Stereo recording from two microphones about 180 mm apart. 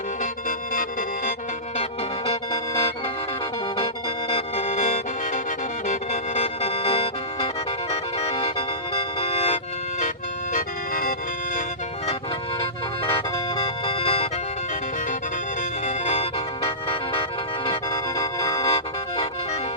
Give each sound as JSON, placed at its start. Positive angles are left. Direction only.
{"t": 0.2, "sound": "music", "side_deg": 50}
{"t": 1.8, "sound": "music", "side_deg": 35}
{"t": 4.3, "sound": "music", "side_deg": 35}
{"t": 10.5, "sound": "music", "side_deg": 50}
{"t": 13.1, "sound": "music", "side_deg": 30}
{"t": 15.9, "sound": "music", "side_deg": 35}
{"t": 18.6, "sound": "music", "side_deg": 35}